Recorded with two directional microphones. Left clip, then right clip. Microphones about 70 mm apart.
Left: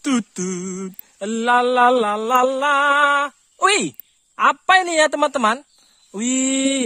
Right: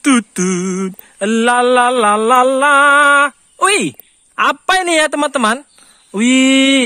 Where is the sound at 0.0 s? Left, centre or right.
Left.